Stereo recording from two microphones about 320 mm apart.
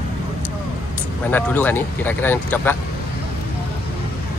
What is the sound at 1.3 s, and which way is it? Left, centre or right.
Speech, centre.